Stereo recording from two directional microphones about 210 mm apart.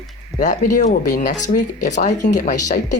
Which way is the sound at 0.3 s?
40° left (ahead or behind).